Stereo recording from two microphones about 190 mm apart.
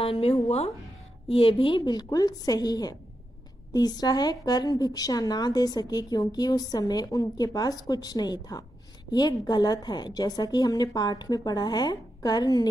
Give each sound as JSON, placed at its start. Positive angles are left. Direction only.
{"t": 0.0, "sound": "speech", "side_deg": 30}
{"t": 1.3, "sound": "a woman's voice", "side_deg": 30}